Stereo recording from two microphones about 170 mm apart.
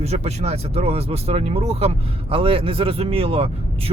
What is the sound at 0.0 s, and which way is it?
Speech, 40° right (ahead or behind).